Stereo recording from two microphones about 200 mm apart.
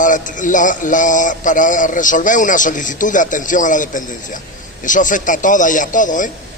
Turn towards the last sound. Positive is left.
turn(degrees=40)  # may be behind; listen again after turning